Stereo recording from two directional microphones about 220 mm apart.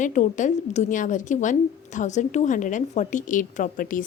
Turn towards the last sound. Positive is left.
turn(degrees=40)  # may be behind; listen again after turning